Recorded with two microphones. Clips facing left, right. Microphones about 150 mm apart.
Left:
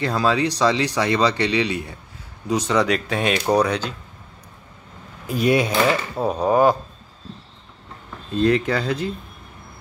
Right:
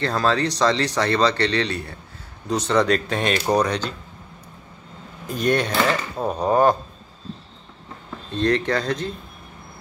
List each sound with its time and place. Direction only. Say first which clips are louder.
0.0 s speech: left 1 dB; 10° left (ahead or behind)
5.2 s speech: left 2 dB; 5° left (ahead or behind)
8.4 s speech: left 2 dB; 5° left (ahead or behind)